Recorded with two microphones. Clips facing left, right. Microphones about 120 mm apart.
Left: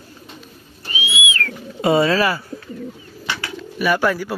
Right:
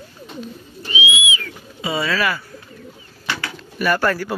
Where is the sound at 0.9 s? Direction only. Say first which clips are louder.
Right 2 dB; 40° left (ahead or behind).